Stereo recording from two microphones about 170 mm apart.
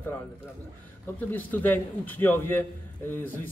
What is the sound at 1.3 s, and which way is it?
Speech, 10° left (ahead or behind).